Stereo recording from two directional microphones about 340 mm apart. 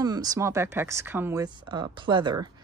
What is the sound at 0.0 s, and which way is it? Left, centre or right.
Speech, centre.